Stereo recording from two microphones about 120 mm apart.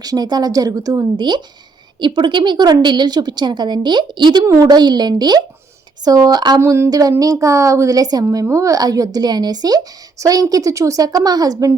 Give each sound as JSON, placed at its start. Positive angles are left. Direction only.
{"t": 0.0, "sound": "a woman's voice", "side_deg": -35}
{"t": 4.4, "sound": "a woman's voice", "side_deg": -30}
{"t": 6.6, "sound": "a woman's voice", "side_deg": -20}